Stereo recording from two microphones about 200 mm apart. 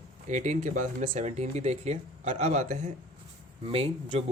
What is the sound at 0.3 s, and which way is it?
Speech, 35° right (ahead or behind).